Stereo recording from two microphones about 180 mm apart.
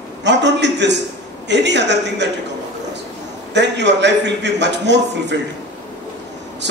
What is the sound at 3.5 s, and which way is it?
A man's voice, 75° right (ahead or behind).